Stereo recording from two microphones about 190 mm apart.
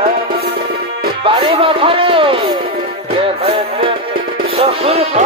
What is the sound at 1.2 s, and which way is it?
Music, 25° right (ahead or behind).